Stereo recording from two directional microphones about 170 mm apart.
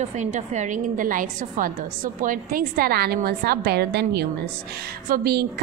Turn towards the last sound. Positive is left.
turn(degrees=-65)  # may be behind; listen again after turning